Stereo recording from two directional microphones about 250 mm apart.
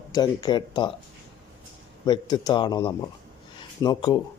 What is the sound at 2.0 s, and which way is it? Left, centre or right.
A man's voice, centre.